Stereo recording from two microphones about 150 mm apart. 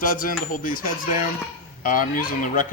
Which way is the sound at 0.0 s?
70° left (ahead or behind).